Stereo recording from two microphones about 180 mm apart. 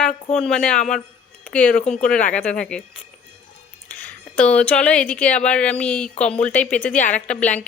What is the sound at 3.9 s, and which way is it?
Speech, 10° left (ahead or behind).